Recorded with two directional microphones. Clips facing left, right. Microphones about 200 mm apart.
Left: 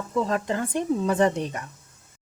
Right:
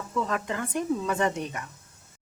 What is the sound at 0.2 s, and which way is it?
Speech, 35° left (ahead or behind).